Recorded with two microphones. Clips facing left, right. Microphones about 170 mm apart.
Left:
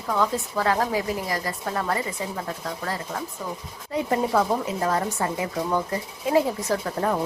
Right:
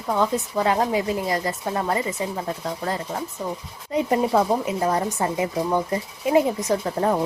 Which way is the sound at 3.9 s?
20° right (ahead or behind).